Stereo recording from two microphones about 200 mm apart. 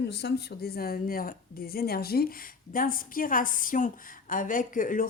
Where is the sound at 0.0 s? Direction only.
55° left (ahead or behind).